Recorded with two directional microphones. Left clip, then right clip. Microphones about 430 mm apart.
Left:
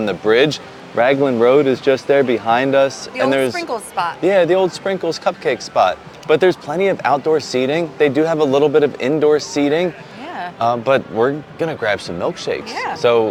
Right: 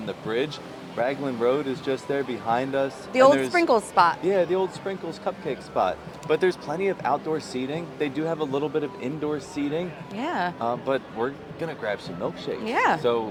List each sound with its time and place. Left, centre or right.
0.0 s speech: left
3.1 s speech: right
4.3 s speech: left
10.2 s a sound: right
10.6 s speech: left
12.7 s speech: right
13.0 s speech: left